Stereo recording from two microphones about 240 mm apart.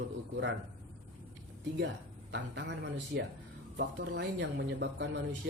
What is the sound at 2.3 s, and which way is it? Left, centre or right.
Speech, right.